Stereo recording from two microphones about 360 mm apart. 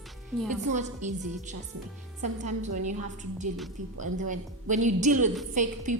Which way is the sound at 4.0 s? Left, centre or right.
Right.